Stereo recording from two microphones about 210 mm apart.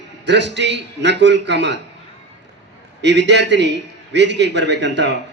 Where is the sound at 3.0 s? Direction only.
55° right (ahead or behind).